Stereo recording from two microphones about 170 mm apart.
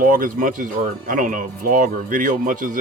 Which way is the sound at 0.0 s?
55° right (ahead or behind).